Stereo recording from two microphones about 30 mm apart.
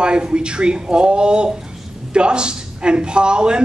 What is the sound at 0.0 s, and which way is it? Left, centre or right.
Speech, right.